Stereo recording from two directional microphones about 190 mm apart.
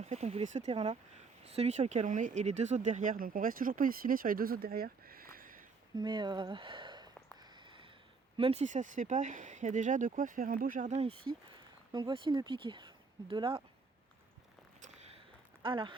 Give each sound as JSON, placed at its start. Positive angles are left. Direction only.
{"t": 0.0, "sound": "speech", "side_deg": -35}
{"t": 6.0, "sound": "speech", "side_deg": -25}
{"t": 7.5, "sound": "a sound", "side_deg": -25}
{"t": 8.4, "sound": "speech", "side_deg": -30}
{"t": 14.8, "sound": "a sound", "side_deg": -35}
{"t": 15.6, "sound": "speech", "side_deg": -25}